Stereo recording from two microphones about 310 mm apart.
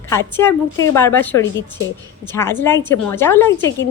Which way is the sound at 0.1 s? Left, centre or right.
Centre.